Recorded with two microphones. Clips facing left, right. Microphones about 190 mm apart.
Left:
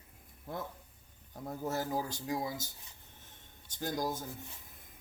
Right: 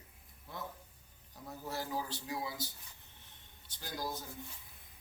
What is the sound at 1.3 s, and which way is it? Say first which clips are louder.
A man's voice: left 6 dB; 50° left (ahead or behind).